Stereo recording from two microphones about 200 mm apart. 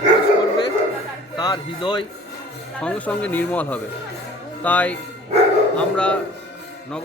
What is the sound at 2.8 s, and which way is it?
A man's voice, 5° left (ahead or behind).